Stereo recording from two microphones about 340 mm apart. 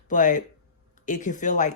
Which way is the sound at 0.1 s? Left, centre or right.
Left.